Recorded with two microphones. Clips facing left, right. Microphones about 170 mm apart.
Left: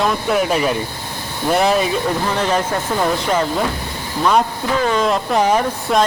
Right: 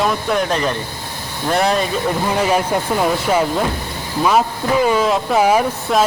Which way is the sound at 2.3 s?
10° right (ahead or behind).